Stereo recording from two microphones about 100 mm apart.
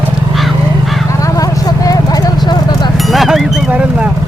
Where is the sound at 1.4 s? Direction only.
35° left (ahead or behind).